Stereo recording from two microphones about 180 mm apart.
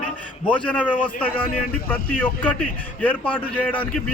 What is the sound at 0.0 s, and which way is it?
A man's voice, 5° left (ahead or behind).